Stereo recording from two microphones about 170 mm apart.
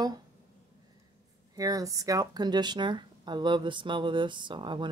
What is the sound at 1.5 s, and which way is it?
Speech, 20° right (ahead or behind).